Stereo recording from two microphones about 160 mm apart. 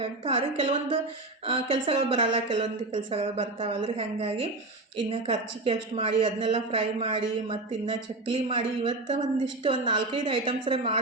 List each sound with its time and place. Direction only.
0.0 s a woman's voice: 35° right (ahead or behind)